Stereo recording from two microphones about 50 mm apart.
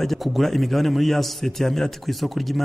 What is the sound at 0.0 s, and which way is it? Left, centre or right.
A man's voice, centre.